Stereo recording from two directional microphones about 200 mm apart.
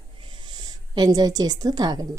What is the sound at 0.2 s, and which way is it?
A woman's voice, 25° right (ahead or behind).